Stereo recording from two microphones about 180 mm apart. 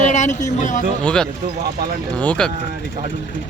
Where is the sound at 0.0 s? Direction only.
40° left (ahead or behind).